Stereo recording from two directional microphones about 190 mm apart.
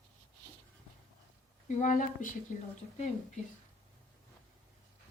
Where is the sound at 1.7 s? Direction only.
40° left (ahead or behind).